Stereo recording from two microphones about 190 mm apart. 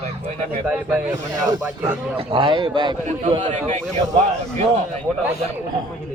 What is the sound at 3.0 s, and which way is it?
Speech, 40° right (ahead or behind).